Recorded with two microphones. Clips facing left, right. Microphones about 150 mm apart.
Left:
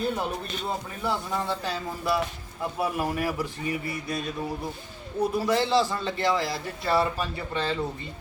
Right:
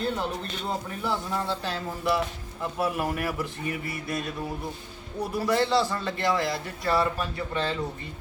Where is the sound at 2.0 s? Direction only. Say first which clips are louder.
Right 1 dB; centre (ahead or behind).